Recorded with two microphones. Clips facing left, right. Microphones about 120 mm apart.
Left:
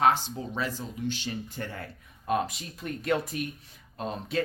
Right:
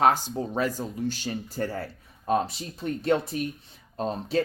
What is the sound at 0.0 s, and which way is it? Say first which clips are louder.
Speech: right 2 dB; 40° right (ahead or behind).